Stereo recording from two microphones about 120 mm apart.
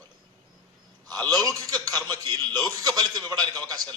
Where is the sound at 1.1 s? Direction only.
35° right (ahead or behind).